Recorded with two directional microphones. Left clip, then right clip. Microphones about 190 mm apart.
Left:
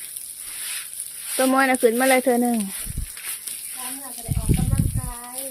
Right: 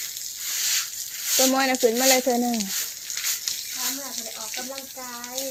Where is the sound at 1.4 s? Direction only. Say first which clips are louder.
Left 3 dB; 25° left (ahead or behind).